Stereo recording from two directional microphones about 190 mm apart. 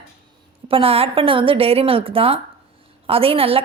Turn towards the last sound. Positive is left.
turn(degrees=-30)  # may be behind; listen again after turning